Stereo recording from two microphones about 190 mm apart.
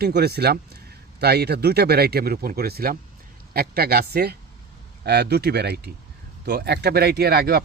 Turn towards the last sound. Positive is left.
turn(degrees=-55)  # may be behind; listen again after turning